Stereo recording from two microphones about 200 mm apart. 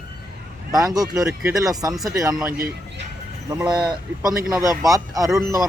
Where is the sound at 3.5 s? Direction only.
5° right (ahead or behind).